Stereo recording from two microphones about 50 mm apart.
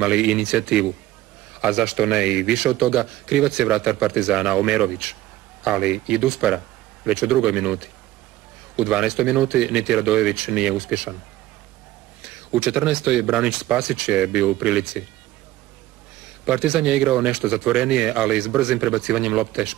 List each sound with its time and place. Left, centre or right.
0.0 s speech: centre
12.2 s speech: centre
16.4 s speech: centre